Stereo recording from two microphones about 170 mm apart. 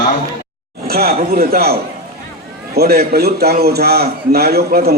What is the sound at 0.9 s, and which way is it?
A man's voice, 65° right (ahead or behind).